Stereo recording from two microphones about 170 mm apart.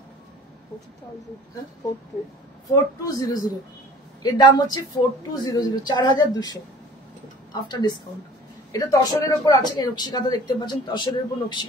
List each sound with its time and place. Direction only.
2.7 s speech: 20° left (ahead or behind)
7.6 s speech: 25° left (ahead or behind)